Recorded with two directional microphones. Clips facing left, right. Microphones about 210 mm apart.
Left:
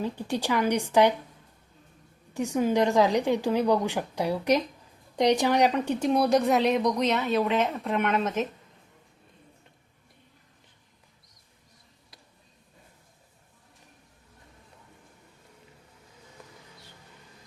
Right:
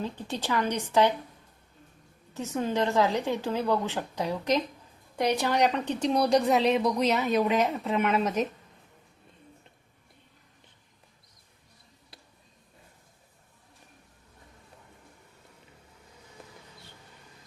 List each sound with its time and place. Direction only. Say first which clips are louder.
0.0 s a woman's voice: left 4 dB; 10° left (ahead or behind)
2.3 s a woman's voice: left 5 dB; 15° left (ahead or behind); by 8.3 s 5° right (ahead or behind)